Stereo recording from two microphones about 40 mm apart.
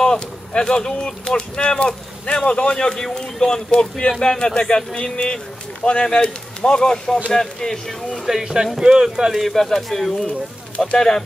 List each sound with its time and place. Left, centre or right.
0.0 s speech: centre
8.3 s speech: centre
9.3 s speech: centre